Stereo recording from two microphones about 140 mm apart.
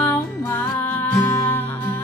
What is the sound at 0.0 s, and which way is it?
Music, 15° left (ahead or behind).